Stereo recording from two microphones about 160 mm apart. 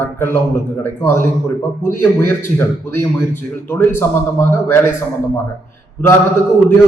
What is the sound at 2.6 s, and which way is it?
A man's voice, 15° left (ahead or behind).